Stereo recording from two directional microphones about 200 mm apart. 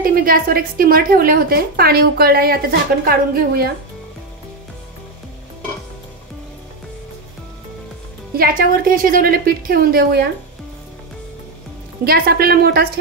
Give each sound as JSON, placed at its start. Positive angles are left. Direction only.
{"t": 0.0, "sound": "a woman's voice", "side_deg": -45}
{"t": 8.4, "sound": "a woman's voice", "side_deg": -45}
{"t": 12.0, "sound": "a woman's voice", "side_deg": -50}